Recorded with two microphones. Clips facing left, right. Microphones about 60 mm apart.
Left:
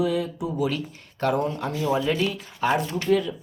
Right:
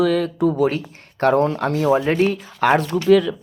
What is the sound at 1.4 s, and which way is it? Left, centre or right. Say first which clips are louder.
Speech: right 8 dB; right.